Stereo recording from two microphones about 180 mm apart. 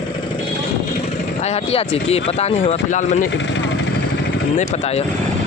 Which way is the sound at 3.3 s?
90° left.